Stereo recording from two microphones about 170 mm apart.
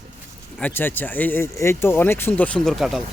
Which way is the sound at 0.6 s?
10° left (ahead or behind).